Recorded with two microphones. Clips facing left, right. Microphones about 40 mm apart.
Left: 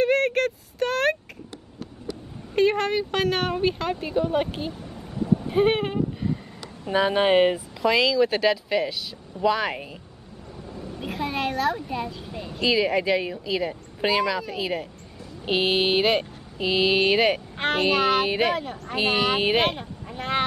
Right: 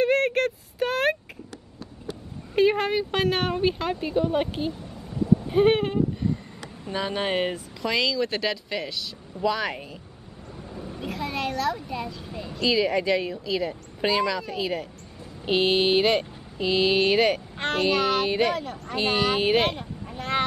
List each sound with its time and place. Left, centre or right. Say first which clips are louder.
0.0 s a sound: left 1 dB; centre
2.5 s speech: even; centre
6.9 s speech: left 7 dB; centre
7.8 s speech: left 5 dB; centre
10.7 s vehicle: left 1 dB; centre
11.0 s speech: left 2 dB; centre